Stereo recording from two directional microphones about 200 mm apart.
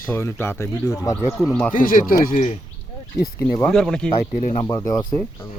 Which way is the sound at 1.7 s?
45° left (ahead or behind).